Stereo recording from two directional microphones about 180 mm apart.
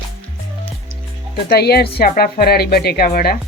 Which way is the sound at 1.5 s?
60° left (ahead or behind).